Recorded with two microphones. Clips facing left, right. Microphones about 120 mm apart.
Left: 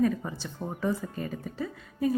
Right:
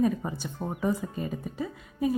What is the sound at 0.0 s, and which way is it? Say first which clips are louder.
A woman's voice: even; 20° right (ahead or behind).